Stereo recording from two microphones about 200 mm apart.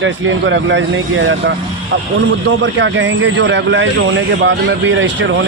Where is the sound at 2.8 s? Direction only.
70° right (ahead or behind).